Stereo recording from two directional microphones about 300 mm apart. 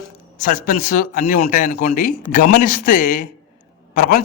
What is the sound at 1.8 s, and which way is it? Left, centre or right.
Speech, left.